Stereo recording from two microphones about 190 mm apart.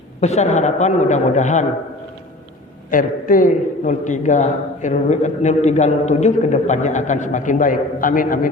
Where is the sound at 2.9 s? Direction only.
45° left (ahead or behind).